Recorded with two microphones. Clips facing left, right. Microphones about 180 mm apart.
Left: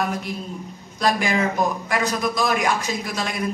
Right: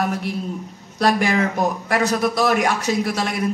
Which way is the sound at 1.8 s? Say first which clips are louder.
Right 4 dB; 65° right (ahead or behind).